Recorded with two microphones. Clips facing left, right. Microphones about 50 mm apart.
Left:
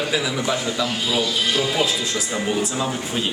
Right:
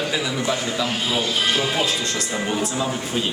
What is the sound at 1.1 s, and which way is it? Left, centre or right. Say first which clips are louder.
Speech: even; right.